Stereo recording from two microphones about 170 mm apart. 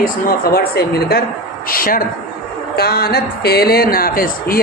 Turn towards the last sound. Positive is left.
turn(degrees=55)  # may be behind; listen again after turning